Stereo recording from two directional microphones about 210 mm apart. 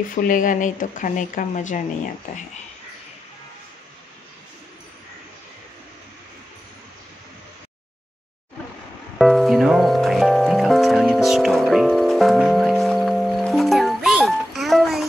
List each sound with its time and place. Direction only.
0.1 s speech: 40° left (ahead or behind)
9.2 s music: centre (ahead or behind)